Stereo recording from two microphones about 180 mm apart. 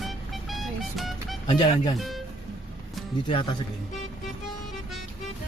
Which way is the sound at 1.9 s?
Centre (ahead or behind).